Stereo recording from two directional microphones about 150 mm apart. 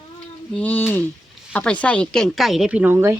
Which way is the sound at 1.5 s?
10° left (ahead or behind).